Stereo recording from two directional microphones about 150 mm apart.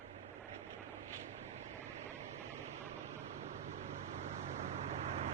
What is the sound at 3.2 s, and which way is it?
Vehicle, 50° right (ahead or behind).